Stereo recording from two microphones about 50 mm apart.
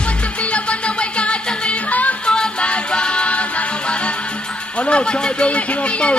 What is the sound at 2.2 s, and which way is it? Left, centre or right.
Music, centre.